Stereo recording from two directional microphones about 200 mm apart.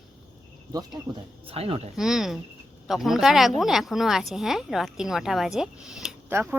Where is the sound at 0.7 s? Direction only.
20° right (ahead or behind).